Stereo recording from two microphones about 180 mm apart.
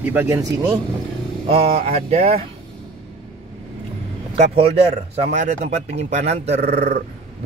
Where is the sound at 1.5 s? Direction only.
35° right (ahead or behind).